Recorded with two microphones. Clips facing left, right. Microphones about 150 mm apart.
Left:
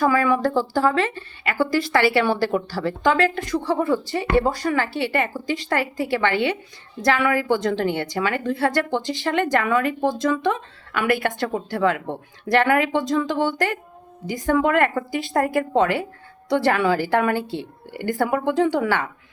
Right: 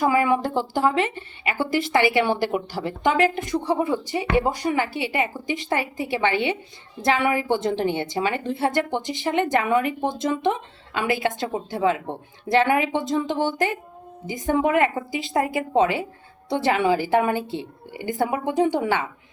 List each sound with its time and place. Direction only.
0.0 s speech: 20° right (ahead or behind)
15.3 s a woman's voice: 50° left (ahead or behind)
15.5 s speech: 20° right (ahead or behind)